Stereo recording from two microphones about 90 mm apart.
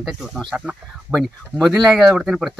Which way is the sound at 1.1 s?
20° right (ahead or behind).